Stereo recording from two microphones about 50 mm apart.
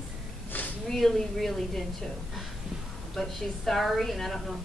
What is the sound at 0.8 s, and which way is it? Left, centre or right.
Speech, centre.